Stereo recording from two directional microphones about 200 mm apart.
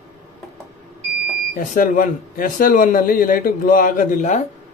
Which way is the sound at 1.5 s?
45° left (ahead or behind).